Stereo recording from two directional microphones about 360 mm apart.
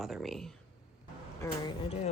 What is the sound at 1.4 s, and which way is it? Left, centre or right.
Speech, centre.